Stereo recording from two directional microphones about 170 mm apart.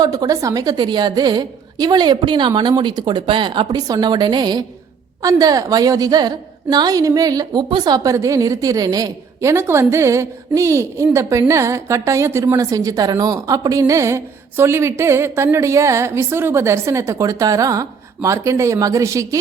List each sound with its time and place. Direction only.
0.0 s a woman's voice: 20° right (ahead or behind)